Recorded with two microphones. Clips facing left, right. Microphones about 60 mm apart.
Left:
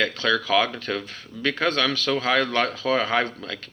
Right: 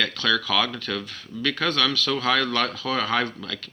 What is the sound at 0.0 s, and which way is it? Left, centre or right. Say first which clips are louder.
Speech: left 1 dB; left.